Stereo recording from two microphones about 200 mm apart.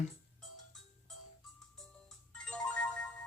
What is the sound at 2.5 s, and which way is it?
Music, 5° left (ahead or behind).